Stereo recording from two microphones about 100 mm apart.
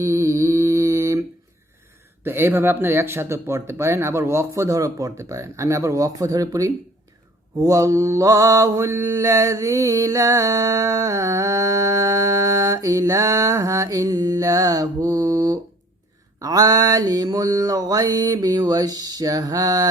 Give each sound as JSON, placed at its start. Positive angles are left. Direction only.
{"t": 0.0, "sound": "mantra", "side_deg": -30}
{"t": 2.2, "sound": "speech", "side_deg": -25}
{"t": 7.6, "sound": "mantra", "side_deg": -35}